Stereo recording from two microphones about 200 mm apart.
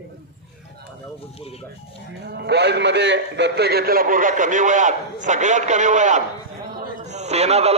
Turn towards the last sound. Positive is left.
turn(degrees=-30)  # may be behind; listen again after turning